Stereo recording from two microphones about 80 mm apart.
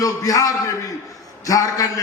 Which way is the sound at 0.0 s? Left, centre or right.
Left.